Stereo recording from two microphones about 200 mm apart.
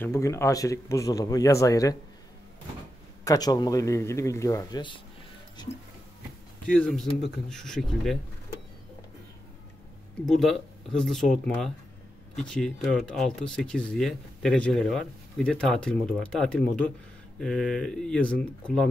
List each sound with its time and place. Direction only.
0.0 s speech: 15° left (ahead or behind)
3.3 s speech: 20° left (ahead or behind)
6.6 s speech: 5° left (ahead or behind)
10.2 s speech: centre (ahead or behind)